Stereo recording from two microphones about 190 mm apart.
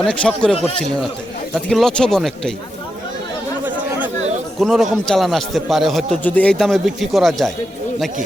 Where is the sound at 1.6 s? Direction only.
5° left (ahead or behind).